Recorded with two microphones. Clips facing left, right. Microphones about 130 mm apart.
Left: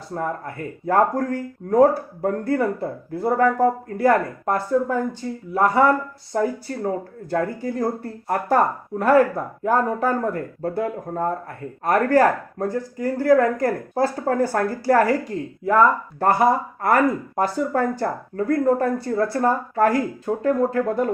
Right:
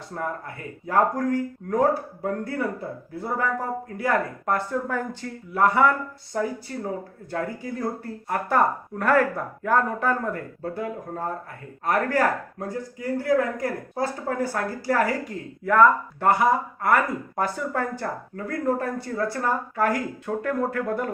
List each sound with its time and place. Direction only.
0.1 s speech: 40° left (ahead or behind)
2.2 s speech: 45° left (ahead or behind)
5.2 s speech: 20° left (ahead or behind)
5.5 s speech: 35° left (ahead or behind)
15.6 s speech: 30° left (ahead or behind)